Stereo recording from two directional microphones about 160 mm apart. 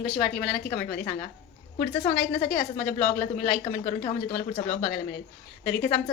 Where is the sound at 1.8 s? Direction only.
40° left (ahead or behind).